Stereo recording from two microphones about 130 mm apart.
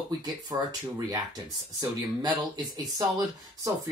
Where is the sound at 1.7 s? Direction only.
30° right (ahead or behind).